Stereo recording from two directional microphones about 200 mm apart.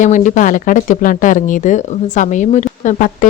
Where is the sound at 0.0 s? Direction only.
40° left (ahead or behind).